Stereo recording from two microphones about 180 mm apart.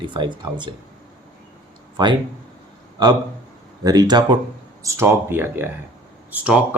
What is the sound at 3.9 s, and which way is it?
Speech, 20° right (ahead or behind).